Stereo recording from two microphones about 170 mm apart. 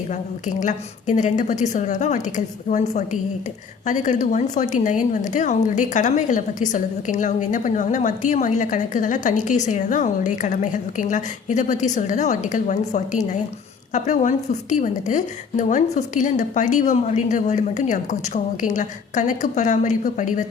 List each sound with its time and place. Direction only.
0.1 s a woman's voice: 45° left (ahead or behind)